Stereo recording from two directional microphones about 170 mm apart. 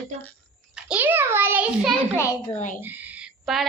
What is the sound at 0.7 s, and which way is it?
A child's voice, 10° right (ahead or behind).